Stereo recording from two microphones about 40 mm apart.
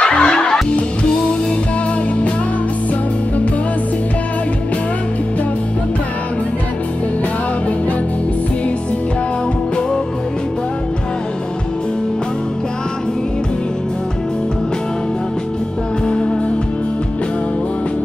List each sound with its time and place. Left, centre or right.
0.0 s music: left